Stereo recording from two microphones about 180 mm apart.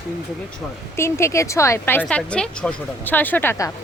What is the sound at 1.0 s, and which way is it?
A woman's voice, 15° left (ahead or behind).